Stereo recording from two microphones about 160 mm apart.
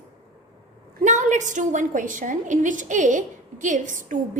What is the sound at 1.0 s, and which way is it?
A woman's voice, 50° right (ahead or behind).